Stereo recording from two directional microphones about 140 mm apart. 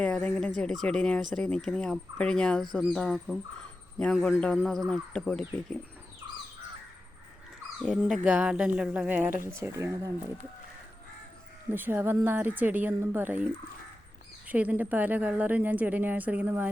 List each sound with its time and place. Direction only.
0.0 s speech: 10° left (ahead or behind)
7.8 s a woman's voice: 5° right (ahead or behind); by 10.1 s 20° right (ahead or behind)
11.7 s a woman's voice: 15° right (ahead or behind)